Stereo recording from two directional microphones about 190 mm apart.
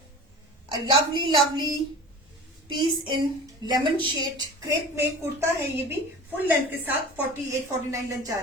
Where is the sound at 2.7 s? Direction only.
25° right (ahead or behind).